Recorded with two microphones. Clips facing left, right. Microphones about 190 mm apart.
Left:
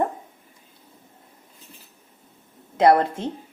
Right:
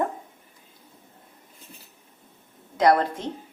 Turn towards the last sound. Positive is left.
turn(degrees=25)  # may be behind; listen again after turning